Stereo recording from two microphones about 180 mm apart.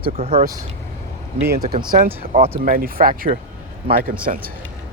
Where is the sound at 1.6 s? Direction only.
25° right (ahead or behind).